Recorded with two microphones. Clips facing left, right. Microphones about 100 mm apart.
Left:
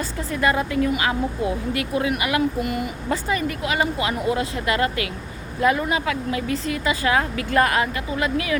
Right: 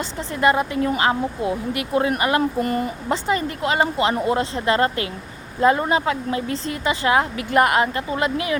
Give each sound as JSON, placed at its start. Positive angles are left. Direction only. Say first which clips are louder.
{"t": 0.0, "sound": "a woman's voice", "louder": "right 3 dB", "side_deg": -25}
{"t": 2.0, "sound": "speech", "louder": "right 4 dB", "side_deg": -35}
{"t": 3.1, "sound": "a woman's voice", "louder": "right 1 dB", "side_deg": -25}